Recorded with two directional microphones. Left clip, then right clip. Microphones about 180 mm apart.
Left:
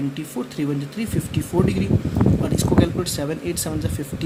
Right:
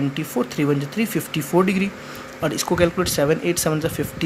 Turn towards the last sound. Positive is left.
turn(degrees=-35)  # may be behind; listen again after turning